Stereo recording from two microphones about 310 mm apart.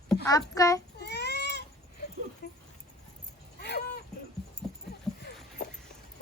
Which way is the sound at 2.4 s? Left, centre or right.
Left.